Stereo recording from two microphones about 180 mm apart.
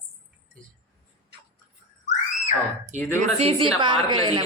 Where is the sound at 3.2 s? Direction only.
35° right (ahead or behind).